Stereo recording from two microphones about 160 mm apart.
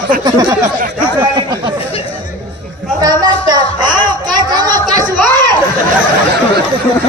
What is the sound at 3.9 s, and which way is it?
Chatter, 25° right (ahead or behind).